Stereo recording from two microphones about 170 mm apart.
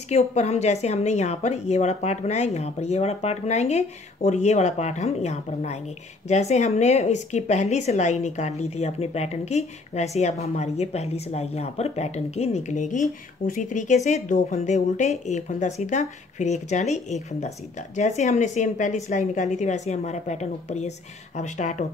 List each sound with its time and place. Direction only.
0.1 s a woman's voice: 40° left (ahead or behind)